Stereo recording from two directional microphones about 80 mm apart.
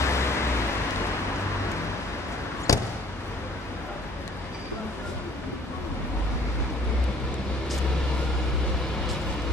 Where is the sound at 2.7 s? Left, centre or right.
Left.